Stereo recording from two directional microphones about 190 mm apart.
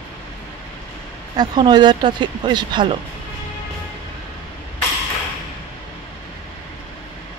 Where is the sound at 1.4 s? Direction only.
25° right (ahead or behind).